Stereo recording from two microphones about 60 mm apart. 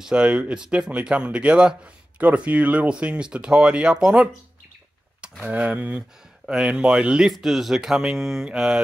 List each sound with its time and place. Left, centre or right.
0.0 s speech: centre
5.5 s speech: right
7.2 s speech: centre